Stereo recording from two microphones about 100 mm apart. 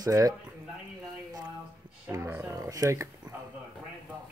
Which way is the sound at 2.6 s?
35° right (ahead or behind).